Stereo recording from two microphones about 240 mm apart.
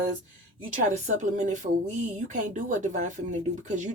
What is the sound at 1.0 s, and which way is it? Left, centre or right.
Speech, right.